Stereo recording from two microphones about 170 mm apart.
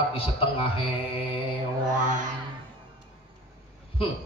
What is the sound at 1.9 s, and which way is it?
Mantra, 50° right (ahead or behind).